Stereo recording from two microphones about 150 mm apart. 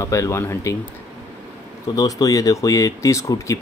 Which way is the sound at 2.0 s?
25° left (ahead or behind).